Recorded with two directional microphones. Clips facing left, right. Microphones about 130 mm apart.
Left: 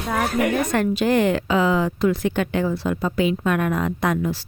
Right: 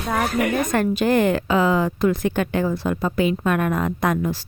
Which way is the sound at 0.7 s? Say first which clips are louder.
Even; 45° right (ahead or behind).